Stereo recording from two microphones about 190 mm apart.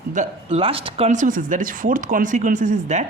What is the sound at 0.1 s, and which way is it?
Speech, 35° right (ahead or behind).